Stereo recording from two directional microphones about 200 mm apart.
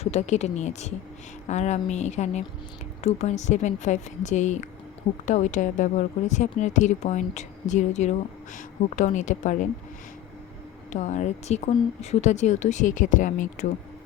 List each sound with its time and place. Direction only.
0.0 s a woman's voice: 35° left (ahead or behind)
10.9 s a woman's voice: 35° left (ahead or behind)